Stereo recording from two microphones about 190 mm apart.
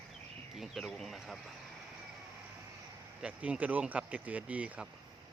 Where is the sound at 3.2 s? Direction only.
5° right (ahead or behind).